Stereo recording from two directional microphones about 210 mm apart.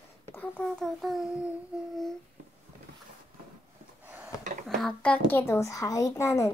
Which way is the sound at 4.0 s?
10° right (ahead or behind).